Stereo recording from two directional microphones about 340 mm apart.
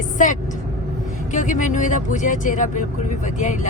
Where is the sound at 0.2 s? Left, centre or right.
Left.